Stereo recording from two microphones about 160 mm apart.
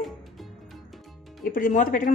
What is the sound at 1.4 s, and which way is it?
Speech, 60° left (ahead or behind).